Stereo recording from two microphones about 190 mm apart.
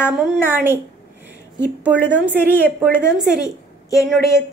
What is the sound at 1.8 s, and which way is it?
Speech, 5° right (ahead or behind).